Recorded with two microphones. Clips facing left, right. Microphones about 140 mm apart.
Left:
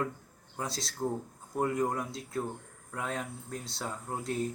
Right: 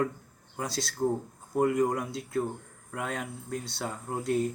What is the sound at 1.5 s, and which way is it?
Speech, 15° right (ahead or behind).